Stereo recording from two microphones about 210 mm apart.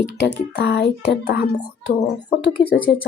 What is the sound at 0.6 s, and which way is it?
A child's voice, 50° left (ahead or behind).